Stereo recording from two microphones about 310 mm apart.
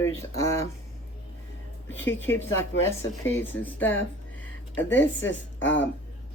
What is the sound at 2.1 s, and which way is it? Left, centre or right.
Speech, centre.